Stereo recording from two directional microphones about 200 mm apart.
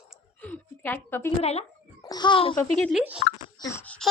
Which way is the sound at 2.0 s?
20° left (ahead or behind).